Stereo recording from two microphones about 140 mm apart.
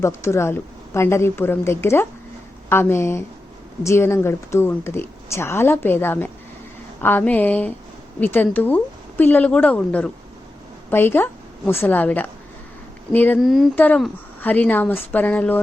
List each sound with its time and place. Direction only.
0.0 s a woman's voice: 20° left (ahead or behind)
13.4 s speech: centre (ahead or behind)
13.7 s speech: 10° left (ahead or behind)